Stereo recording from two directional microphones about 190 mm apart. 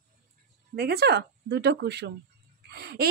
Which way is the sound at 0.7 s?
55° right (ahead or behind).